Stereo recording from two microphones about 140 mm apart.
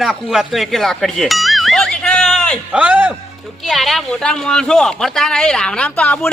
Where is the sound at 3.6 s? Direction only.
Centre (ahead or behind).